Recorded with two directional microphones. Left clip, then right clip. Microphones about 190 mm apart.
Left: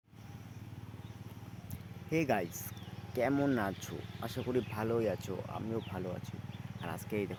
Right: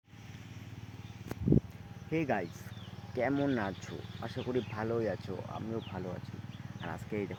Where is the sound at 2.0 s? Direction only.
15° left (ahead or behind).